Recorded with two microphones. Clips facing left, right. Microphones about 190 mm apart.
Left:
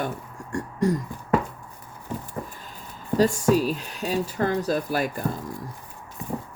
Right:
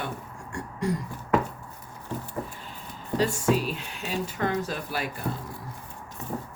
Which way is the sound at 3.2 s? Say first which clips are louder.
Left 5 dB; 40° left (ahead or behind).